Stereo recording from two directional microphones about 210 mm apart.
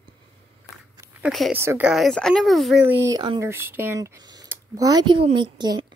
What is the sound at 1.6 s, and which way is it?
Speech, 10° right (ahead or behind).